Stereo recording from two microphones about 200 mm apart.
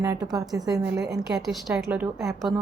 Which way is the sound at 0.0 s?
15° right (ahead or behind).